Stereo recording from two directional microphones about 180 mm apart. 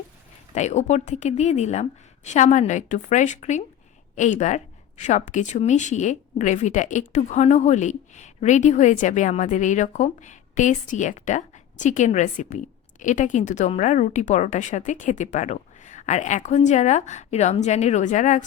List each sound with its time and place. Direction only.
0.5 s a woman's voice: 40° left (ahead or behind)